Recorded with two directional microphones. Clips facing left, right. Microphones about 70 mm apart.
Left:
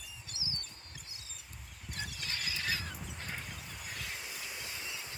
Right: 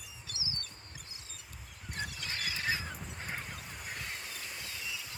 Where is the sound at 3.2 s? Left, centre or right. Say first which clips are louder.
Right 3 dB; centre.